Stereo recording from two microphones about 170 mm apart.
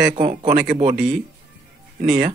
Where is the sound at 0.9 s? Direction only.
5° right (ahead or behind).